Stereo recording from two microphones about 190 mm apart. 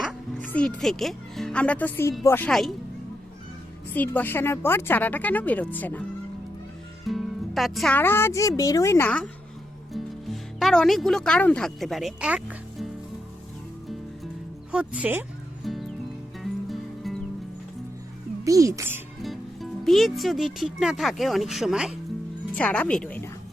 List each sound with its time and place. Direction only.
0.4 s speech: 5° left (ahead or behind)
3.9 s speech: 10° left (ahead or behind)
14.7 s speech: 5° right (ahead or behind)
15.6 s music: centre (ahead or behind)
18.4 s speech: 15° right (ahead or behind)
19.2 s a woman's voice: centre (ahead or behind)